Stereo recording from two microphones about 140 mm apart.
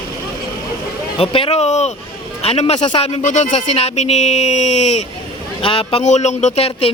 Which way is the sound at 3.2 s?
60° left (ahead or behind).